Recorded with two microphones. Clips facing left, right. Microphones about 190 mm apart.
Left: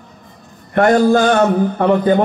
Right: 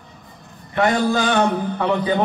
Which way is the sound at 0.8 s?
50° left (ahead or behind).